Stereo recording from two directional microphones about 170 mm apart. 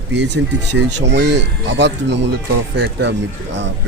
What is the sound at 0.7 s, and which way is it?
Speech, 90° right.